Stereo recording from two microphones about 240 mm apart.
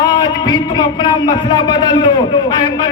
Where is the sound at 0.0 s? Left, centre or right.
Centre.